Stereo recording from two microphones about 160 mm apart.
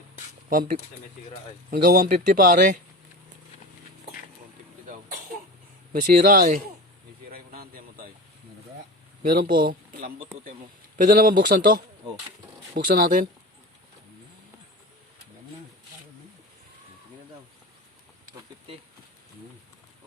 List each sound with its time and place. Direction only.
1.7 s speech: 60° right (ahead or behind)
5.9 s speech: 60° right (ahead or behind)
7.3 s a sound: 65° right (ahead or behind)
9.3 s speech: 65° right (ahead or behind)